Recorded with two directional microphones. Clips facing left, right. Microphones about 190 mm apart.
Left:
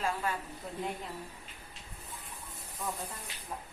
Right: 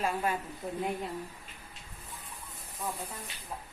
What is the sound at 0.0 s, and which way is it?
Speech, 15° right (ahead or behind).